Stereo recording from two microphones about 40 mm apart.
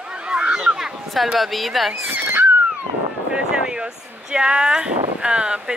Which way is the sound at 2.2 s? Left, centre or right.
Right.